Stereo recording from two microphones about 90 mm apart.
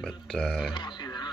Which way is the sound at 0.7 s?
60° left (ahead or behind).